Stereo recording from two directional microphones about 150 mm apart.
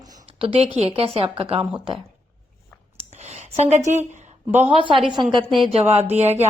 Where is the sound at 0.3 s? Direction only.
40° right (ahead or behind).